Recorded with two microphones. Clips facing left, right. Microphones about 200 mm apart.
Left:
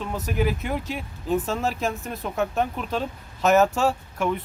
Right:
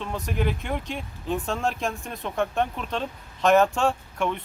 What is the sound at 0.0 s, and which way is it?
Speech, 5° left (ahead or behind).